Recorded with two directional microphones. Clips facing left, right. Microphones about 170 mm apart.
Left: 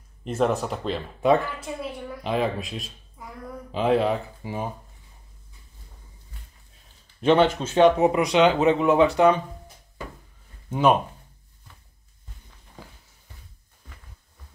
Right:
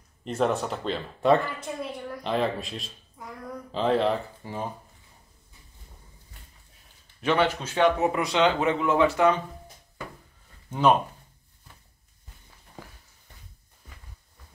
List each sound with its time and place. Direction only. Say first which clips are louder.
0.2 s speech: left 2 dB; centre (ahead or behind)
7.2 s speech: left 5 dB; 30° left (ahead or behind)
10.7 s speech: left 1 dB; 15° left (ahead or behind)